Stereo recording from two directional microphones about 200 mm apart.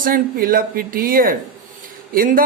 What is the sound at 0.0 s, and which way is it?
Speech, 45° right (ahead or behind).